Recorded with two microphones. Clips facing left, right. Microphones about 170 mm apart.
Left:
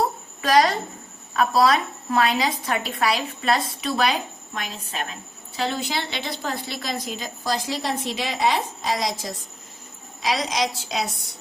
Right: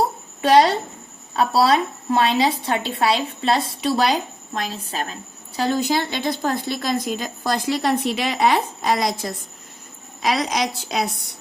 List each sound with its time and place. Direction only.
0.4 s a woman's voice: 30° right (ahead or behind); by 11.1 s 55° right (ahead or behind)